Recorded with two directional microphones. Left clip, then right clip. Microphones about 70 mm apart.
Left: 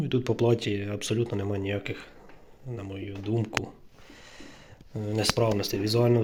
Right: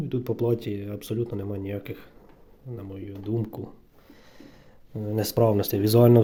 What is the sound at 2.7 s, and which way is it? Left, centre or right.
Speech, right.